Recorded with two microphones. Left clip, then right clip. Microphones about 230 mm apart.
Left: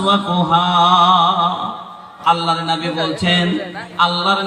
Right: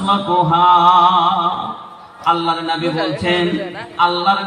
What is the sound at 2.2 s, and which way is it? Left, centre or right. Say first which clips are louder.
Speech: left 1 dB; left.